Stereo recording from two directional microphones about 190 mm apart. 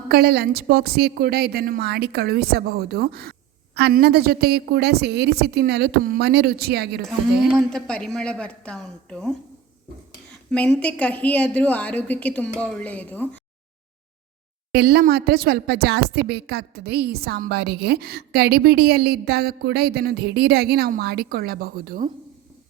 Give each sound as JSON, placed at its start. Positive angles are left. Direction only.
{"t": 0.1, "sound": "a woman's voice", "side_deg": -55}
{"t": 7.5, "sound": "speech", "side_deg": 5}
{"t": 10.5, "sound": "a woman's voice", "side_deg": 5}
{"t": 14.7, "sound": "a woman's voice", "side_deg": -55}